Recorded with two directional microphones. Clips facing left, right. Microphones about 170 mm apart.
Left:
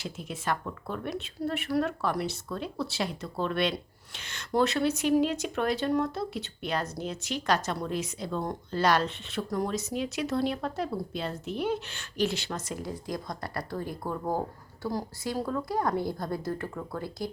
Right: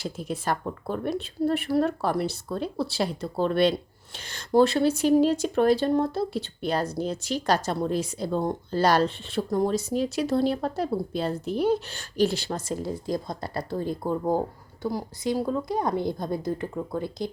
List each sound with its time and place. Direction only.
0.0 s speech: 35° right (ahead or behind); by 17.2 s 20° right (ahead or behind)